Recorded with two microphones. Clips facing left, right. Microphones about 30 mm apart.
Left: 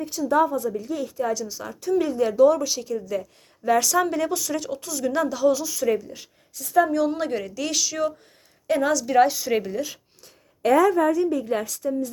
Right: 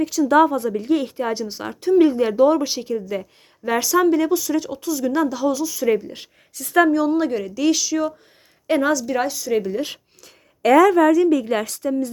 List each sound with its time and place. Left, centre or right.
0.0 s a woman's voice: right
3.8 s speech: centre
6.5 s a woman's voice: right
6.9 s speech: centre
9.0 s speech: centre
9.4 s speech: centre
10.2 s a woman's voice: right